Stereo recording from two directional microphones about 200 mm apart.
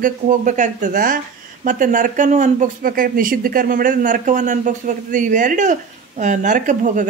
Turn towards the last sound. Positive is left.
turn(degrees=-40)  # may be behind; listen again after turning